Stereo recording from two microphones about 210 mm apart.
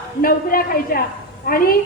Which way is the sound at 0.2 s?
45° left (ahead or behind).